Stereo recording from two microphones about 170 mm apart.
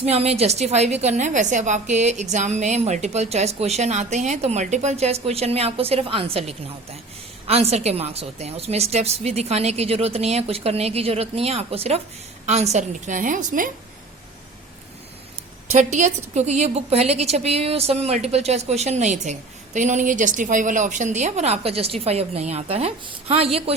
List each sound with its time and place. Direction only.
0.0 s a woman's voice: 35° right (ahead or behind)
15.7 s a woman's voice: 40° right (ahead or behind)